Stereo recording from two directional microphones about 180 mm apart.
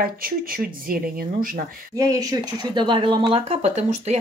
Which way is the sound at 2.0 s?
20° right (ahead or behind).